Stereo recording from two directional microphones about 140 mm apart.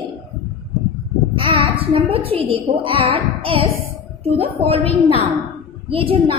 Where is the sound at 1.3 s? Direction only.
35° right (ahead or behind).